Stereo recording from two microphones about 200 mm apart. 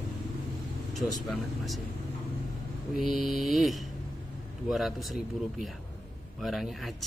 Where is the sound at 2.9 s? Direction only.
Centre (ahead or behind).